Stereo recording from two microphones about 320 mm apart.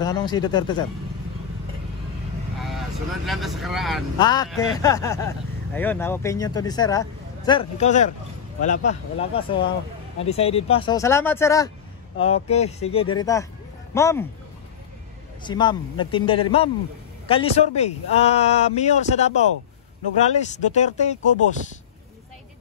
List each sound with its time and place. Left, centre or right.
0.0 s speech: centre
3.3 s speech: centre
4.2 s speech: centre
12.4 s speech: centre
15.4 s speech: centre
20.3 s speech: left